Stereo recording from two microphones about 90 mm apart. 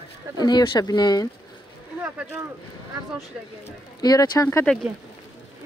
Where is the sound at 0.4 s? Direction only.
50° left (ahead or behind).